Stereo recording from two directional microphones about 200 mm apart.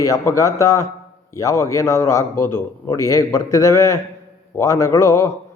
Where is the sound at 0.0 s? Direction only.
15° left (ahead or behind).